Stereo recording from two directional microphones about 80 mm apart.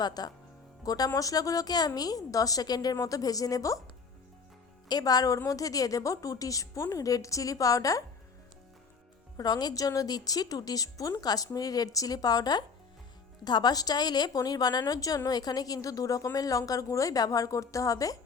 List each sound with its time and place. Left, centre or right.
0.0 s a woman's voice: left
4.9 s a woman's voice: left
9.4 s a woman's voice: left